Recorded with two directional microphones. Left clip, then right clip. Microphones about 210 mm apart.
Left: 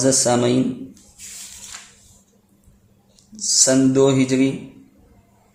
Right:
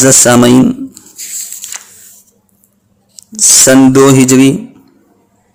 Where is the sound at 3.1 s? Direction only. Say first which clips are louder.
Right 12 dB; 40° right (ahead or behind).